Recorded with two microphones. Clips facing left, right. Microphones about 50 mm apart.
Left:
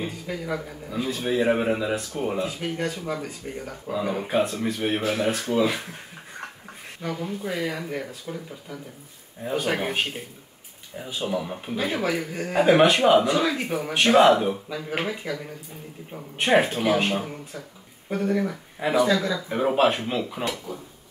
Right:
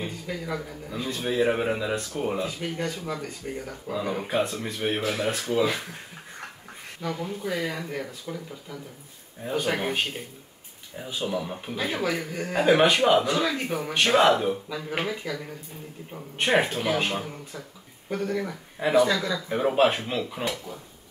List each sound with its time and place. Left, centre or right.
0.0 s a man's voice: centre
3.4 s a man's voice: centre
7.1 s a man's voice: centre